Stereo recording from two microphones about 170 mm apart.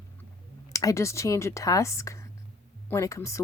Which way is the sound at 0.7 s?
20° left (ahead or behind).